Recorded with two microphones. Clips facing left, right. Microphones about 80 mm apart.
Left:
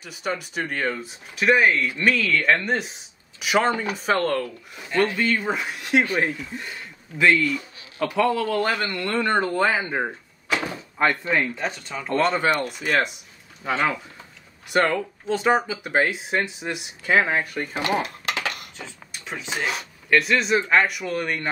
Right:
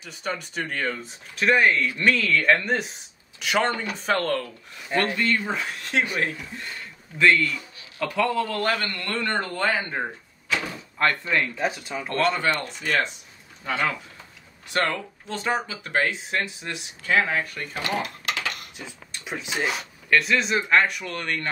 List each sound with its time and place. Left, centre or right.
0.0 s speech: centre
5.1 s speech: centre
7.2 s speech: centre
8.1 s a man's voice: centre
11.5 s speech: centre
12.2 s speech: left
14.7 s speech: centre
19.4 s speech: centre